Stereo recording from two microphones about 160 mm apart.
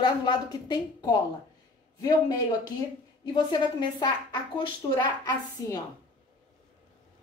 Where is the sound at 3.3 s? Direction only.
30° left (ahead or behind).